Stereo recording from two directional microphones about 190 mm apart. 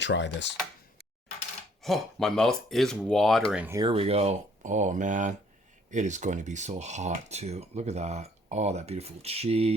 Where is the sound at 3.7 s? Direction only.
25° right (ahead or behind).